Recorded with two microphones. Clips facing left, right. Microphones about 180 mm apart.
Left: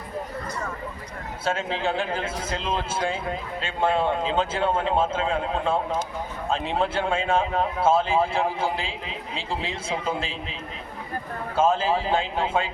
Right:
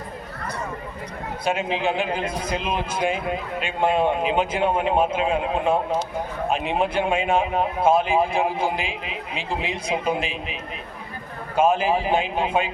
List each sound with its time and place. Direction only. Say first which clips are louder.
1.5 s a man's voice: right 2 dB; 15° right (ahead or behind)